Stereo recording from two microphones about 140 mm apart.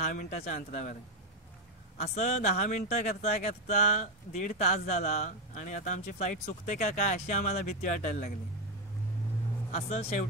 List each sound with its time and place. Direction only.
0.1 s speech: 75° left (ahead or behind)
2.0 s speech: 50° left (ahead or behind)
9.7 s speech: 55° left (ahead or behind)